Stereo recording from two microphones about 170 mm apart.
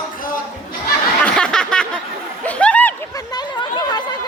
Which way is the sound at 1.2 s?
5° left (ahead or behind).